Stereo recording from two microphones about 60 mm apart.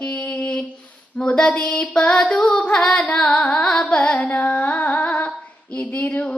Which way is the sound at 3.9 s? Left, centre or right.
Centre.